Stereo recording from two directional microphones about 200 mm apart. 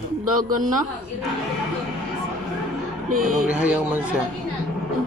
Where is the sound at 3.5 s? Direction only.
5° right (ahead or behind).